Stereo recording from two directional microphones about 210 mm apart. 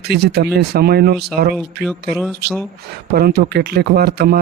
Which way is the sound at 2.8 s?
50° right (ahead or behind).